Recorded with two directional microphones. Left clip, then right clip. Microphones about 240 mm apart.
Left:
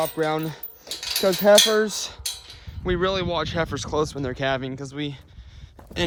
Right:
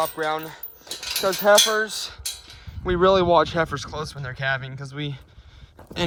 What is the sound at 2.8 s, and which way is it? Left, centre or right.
Speech, centre.